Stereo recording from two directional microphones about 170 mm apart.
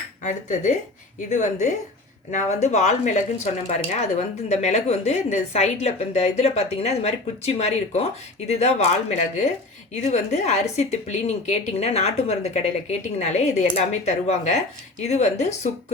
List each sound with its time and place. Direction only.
0.2 s a woman's voice: 45° left (ahead or behind)